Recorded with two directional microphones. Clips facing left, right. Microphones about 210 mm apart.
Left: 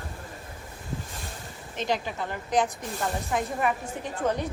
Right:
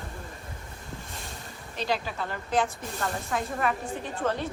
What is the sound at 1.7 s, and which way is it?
Speech, 20° left (ahead or behind).